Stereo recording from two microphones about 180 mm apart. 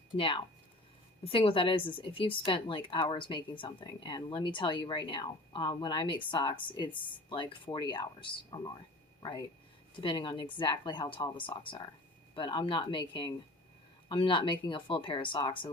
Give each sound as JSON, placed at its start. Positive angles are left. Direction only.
{"t": 0.2, "sound": "speech", "side_deg": 30}
{"t": 10.0, "sound": "speech", "side_deg": 25}